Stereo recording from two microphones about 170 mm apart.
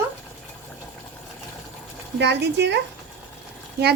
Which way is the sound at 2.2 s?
90° right.